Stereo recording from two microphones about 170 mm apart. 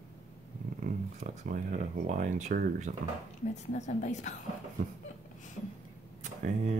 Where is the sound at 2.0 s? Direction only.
45° right (ahead or behind).